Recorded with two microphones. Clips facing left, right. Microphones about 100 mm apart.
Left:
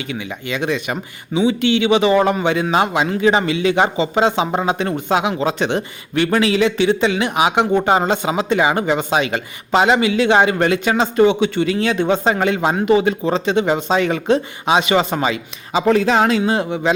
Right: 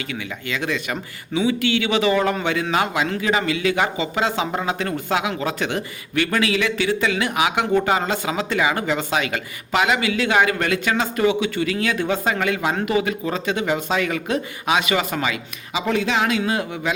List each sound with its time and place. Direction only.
0.1 s a man's voice: 20° left (ahead or behind)